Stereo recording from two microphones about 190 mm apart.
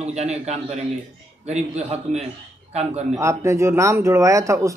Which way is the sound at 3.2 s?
15° right (ahead or behind).